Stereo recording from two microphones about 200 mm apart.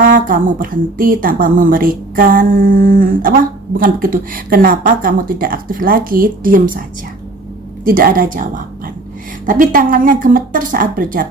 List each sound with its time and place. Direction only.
0.0 s a woman's voice: 45° right (ahead or behind)
7.9 s a woman's voice: 45° right (ahead or behind)
9.5 s a woman's voice: 45° right (ahead or behind)